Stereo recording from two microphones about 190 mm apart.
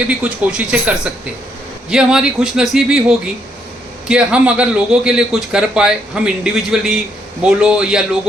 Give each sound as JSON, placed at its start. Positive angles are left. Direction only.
{"t": 0.1, "sound": "speech", "side_deg": -5}